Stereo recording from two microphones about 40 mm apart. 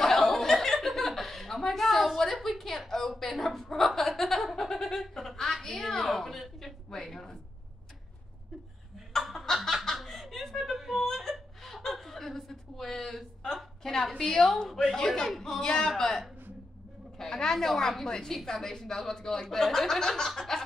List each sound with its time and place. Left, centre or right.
0.0 s chuckle: centre
2.4 s a sound: centre
3.7 s chuckle: centre
5.8 s a sound: centre
7.1 s speech: centre
9.1 s snicker: centre
10.0 s chuckle: centre
11.0 s whimper: centre
11.6 s chuckle: centre
13.8 s a woman's voice: centre
15.0 s a woman's voice: centre
17.2 s a woman's voice: centre